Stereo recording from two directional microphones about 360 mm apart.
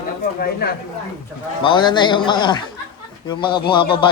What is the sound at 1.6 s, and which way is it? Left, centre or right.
Speech, centre.